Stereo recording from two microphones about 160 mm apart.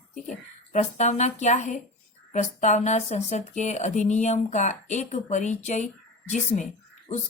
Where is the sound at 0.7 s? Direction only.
50° left (ahead or behind).